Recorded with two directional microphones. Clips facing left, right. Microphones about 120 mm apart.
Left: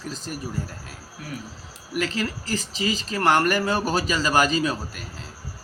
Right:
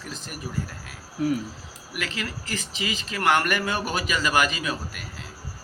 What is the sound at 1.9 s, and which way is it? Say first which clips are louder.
A man's voice: left 6 dB; 35° left (ahead or behind).